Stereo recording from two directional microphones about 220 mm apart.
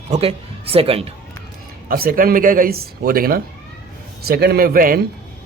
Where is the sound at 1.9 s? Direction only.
40° right (ahead or behind).